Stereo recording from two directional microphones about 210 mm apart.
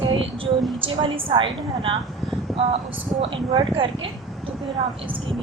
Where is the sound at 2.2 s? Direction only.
Centre (ahead or behind).